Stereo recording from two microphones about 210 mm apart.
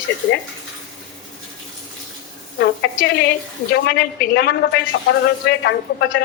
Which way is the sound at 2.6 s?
55° left (ahead or behind).